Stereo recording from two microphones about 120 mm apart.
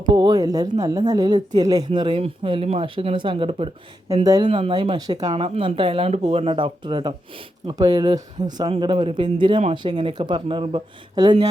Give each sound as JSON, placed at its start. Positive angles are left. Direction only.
{"t": 0.1, "sound": "speech", "side_deg": -35}
{"t": 4.2, "sound": "speech", "side_deg": -35}
{"t": 4.4, "sound": "speech", "side_deg": -55}
{"t": 4.7, "sound": "speech", "side_deg": -40}
{"t": 5.3, "sound": "speech", "side_deg": -50}